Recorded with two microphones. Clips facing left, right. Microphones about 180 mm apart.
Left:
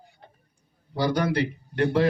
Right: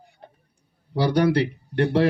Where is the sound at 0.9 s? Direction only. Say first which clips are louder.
Right 4 dB; 35° right (ahead or behind).